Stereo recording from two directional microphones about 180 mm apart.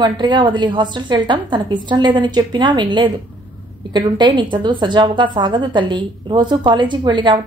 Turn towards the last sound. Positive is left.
turn(degrees=-25)  # may be behind; listen again after turning